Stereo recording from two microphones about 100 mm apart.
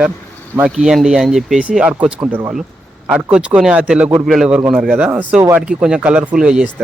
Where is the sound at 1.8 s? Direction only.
15° right (ahead or behind).